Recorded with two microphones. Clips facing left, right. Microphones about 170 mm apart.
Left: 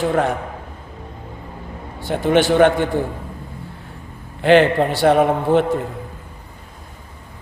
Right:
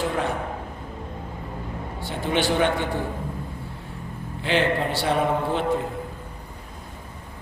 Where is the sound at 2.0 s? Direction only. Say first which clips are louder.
Left 8 dB; 55° left (ahead or behind).